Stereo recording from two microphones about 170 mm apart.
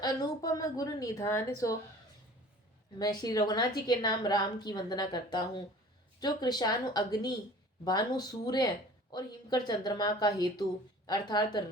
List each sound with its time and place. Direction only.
0.0 s a woman's voice: 20° left (ahead or behind)
3.0 s a woman's voice: 25° left (ahead or behind)